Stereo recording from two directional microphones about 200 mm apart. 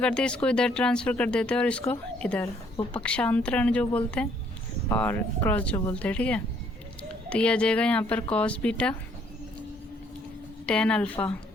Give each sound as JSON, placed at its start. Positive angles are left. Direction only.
{"t": 0.0, "sound": "a woman's voice", "side_deg": 5}
{"t": 10.7, "sound": "speech", "side_deg": 5}